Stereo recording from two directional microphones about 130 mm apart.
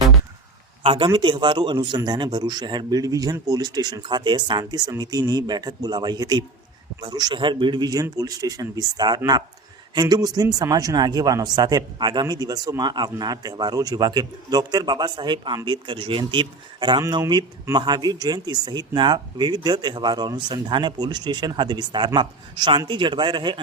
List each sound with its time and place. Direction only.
0.8 s speech: 40° right (ahead or behind)